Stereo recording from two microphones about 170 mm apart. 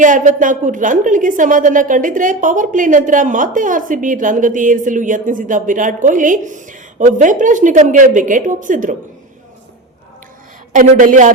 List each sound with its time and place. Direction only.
0.0 s a woman's voice: 50° right (ahead or behind)
10.7 s a woman's voice: 50° right (ahead or behind)